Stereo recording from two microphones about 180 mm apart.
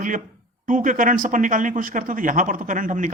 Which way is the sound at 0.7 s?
45° right (ahead or behind).